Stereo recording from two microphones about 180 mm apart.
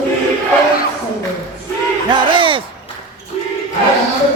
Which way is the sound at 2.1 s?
25° right (ahead or behind).